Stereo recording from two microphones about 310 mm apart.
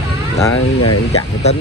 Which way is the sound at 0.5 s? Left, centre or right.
Left.